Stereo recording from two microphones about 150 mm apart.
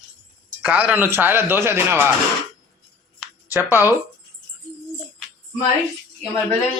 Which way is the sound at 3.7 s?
15° right (ahead or behind).